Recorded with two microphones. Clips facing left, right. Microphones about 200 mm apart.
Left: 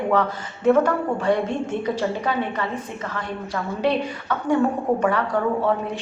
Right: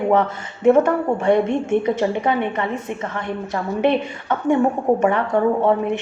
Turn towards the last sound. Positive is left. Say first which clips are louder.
# right 5 dB
turn(degrees=-25)  # may be behind; listen again after turning